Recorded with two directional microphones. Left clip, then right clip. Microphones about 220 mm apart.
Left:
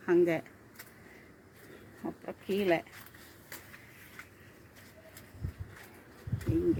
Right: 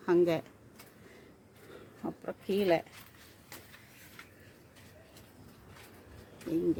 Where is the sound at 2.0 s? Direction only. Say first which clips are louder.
Right 1 dB; 25° right (ahead or behind).